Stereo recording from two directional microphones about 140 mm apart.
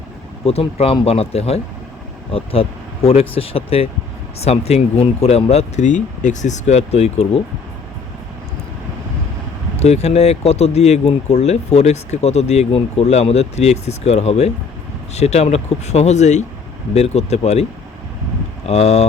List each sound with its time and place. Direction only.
0.4 s speech: 45° left (ahead or behind)
9.8 s speech: 50° left (ahead or behind)
18.7 s speech: 50° left (ahead or behind)